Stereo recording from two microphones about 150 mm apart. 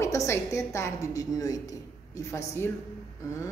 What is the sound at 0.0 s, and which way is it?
Speech, 20° left (ahead or behind).